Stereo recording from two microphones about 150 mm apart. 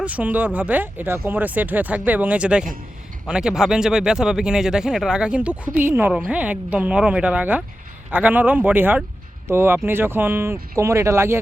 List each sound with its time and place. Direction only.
0.0 s speech: 10° right (ahead or behind)